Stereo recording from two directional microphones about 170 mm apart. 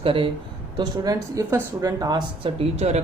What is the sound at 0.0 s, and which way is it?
Speech, 30° right (ahead or behind).